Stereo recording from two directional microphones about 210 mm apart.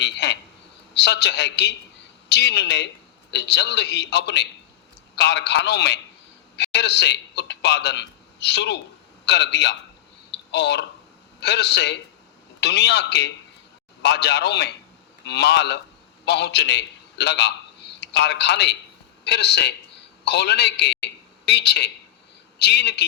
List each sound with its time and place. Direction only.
0.0 s a man's voice: 55° left (ahead or behind)
10.3 s a sound: 55° left (ahead or behind)
11.3 s a man's voice: 55° left (ahead or behind)